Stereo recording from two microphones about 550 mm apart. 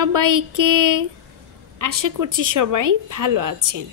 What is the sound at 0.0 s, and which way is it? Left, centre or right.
A woman's voice, right.